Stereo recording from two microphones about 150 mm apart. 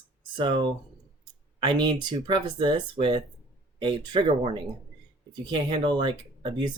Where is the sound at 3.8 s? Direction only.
30° right (ahead or behind).